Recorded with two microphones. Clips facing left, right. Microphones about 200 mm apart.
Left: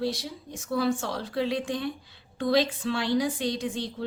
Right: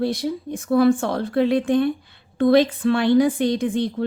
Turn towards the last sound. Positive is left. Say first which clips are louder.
# right 9 dB
turn(degrees=-55)  # may be behind; listen again after turning